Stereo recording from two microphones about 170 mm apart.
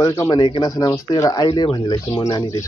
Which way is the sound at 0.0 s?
20° left (ahead or behind).